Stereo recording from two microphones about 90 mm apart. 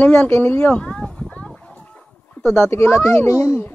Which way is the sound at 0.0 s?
15° left (ahead or behind).